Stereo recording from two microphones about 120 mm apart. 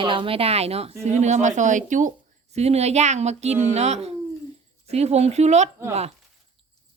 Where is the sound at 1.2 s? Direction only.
80° right.